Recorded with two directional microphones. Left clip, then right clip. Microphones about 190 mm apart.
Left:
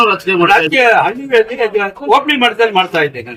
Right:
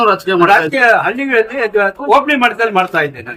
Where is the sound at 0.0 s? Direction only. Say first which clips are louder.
Even; 5° left (ahead or behind).